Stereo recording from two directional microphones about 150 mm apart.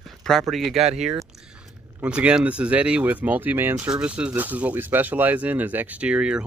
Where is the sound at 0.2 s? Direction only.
Centre (ahead or behind).